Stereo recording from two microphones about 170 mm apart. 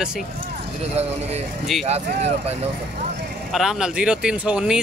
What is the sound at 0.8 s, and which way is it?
Speech, 40° right (ahead or behind).